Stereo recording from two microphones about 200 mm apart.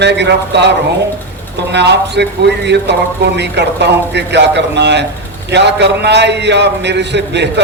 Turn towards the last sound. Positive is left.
turn(degrees=-60)  # may be behind; listen again after turning